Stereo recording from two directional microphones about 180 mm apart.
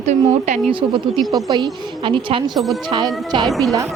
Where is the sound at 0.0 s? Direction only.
40° right (ahead or behind).